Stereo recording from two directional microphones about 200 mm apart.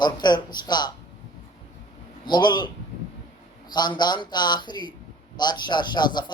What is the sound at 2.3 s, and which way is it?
A man's voice, 20° left (ahead or behind).